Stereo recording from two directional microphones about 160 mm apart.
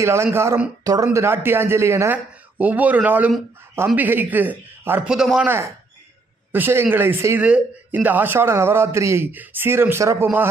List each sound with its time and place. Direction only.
0.0 s speech: 15° right (ahead or behind)